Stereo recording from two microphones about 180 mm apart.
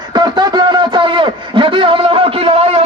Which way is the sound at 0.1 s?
25° right (ahead or behind).